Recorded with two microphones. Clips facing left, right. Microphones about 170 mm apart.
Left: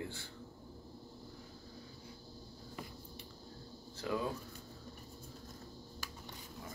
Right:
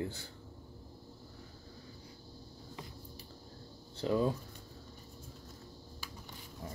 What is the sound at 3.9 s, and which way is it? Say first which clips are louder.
Speech: right 6 dB; 35° right (ahead or behind).